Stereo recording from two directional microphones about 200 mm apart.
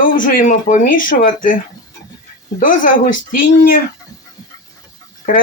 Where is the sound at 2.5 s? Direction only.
40° left (ahead or behind).